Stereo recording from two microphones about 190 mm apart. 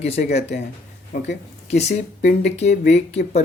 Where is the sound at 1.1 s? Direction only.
40° left (ahead or behind).